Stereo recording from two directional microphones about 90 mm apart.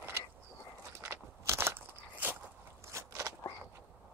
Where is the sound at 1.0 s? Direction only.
30° right (ahead or behind).